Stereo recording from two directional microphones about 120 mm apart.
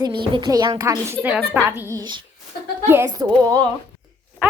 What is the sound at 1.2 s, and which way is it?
A woman's voice, 15° right (ahead or behind).